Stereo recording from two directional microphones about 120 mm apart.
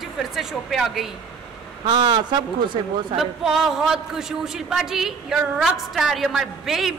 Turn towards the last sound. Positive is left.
turn(degrees=0)  # may be behind; listen again after turning